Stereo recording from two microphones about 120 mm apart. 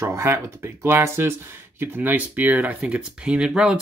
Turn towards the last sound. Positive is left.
turn(degrees=-5)  # may be behind; listen again after turning